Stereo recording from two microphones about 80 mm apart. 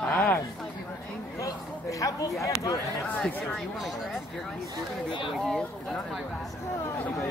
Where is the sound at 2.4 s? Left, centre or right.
Left.